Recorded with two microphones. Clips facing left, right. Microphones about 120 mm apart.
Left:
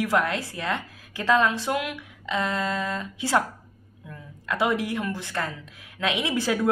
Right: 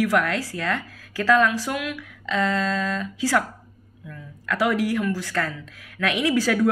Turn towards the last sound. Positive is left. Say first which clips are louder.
# right 4 dB
turn(degrees=20)  # may be behind; listen again after turning